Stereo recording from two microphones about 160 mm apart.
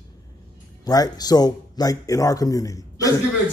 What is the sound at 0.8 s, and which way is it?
A man's voice, 25° left (ahead or behind).